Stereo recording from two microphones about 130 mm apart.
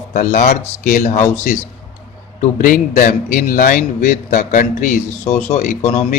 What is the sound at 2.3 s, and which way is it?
A man's voice, 90° left.